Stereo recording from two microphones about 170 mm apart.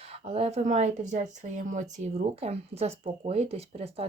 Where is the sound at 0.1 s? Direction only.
35° right (ahead or behind).